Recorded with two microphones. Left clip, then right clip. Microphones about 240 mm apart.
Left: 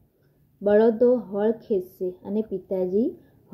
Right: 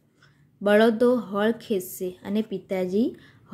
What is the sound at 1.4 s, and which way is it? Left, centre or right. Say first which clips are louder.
Speech: left 2 dB; centre.